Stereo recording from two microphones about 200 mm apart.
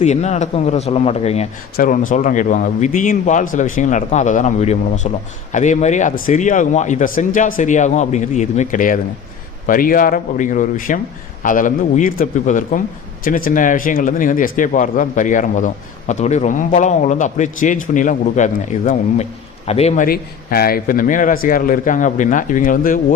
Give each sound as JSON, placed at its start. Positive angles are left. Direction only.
{"t": 0.0, "sound": "speech", "side_deg": 35}
{"t": 1.7, "sound": "a man's voice", "side_deg": 40}
{"t": 20.1, "sound": "a man's voice", "side_deg": 50}